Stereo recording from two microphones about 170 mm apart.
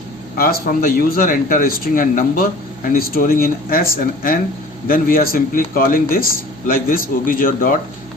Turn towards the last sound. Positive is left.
turn(degrees=55)  # may be behind; listen again after turning